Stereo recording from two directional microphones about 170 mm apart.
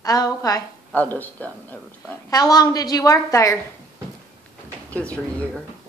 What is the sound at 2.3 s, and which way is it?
A woman's voice, 20° left (ahead or behind).